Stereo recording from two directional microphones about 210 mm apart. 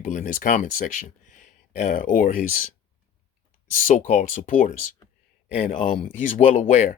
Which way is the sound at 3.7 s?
40° left (ahead or behind).